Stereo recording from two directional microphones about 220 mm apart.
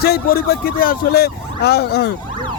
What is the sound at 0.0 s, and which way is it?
Speech, 45° left (ahead or behind).